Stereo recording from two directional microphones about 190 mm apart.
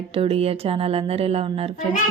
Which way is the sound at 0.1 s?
30° right (ahead or behind).